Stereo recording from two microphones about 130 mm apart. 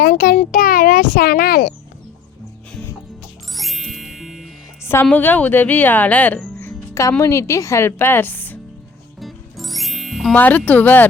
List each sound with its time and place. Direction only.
0.3 s a child's voice: 90° left
3.5 s music: centre (ahead or behind)
4.8 s music: 20° left (ahead or behind)
5.0 s a woman's voice: 15° left (ahead or behind)
6.6 s music: 20° left (ahead or behind)
7.2 s a woman's voice: 20° left (ahead or behind)
9.2 s music: centre (ahead or behind)
10.3 s a woman's voice: 10° left (ahead or behind)